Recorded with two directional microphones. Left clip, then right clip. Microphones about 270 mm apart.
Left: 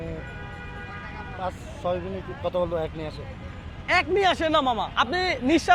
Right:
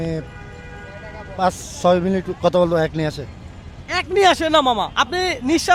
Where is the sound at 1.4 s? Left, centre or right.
Right.